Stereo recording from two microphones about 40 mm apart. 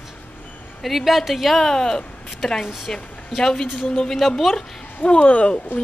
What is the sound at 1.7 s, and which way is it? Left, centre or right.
A woman's voice, centre.